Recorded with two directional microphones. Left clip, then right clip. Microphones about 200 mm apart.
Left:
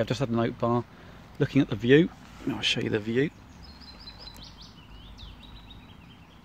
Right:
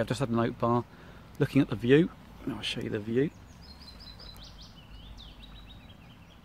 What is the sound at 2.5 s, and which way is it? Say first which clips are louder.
Speech: left 7 dB; 35° left (ahead or behind).